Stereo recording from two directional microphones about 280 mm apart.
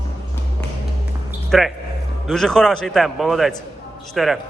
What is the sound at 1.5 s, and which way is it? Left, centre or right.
A man's voice, centre.